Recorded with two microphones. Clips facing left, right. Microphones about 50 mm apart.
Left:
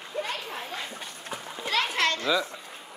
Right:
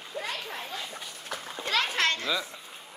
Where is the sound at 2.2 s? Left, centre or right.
Centre.